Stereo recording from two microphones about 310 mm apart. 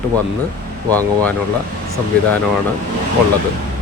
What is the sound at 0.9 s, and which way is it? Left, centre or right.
Speech, centre.